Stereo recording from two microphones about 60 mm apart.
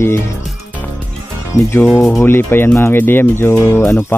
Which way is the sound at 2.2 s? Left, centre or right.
Left.